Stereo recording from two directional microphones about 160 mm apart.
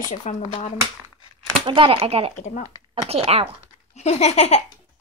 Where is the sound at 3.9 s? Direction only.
40° left (ahead or behind).